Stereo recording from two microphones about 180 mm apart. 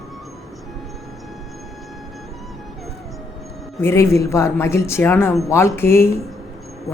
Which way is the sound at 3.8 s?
15° left (ahead or behind).